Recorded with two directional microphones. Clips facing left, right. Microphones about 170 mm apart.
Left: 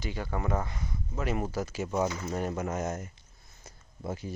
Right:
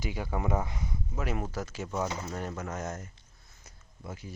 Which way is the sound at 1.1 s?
Centre (ahead or behind).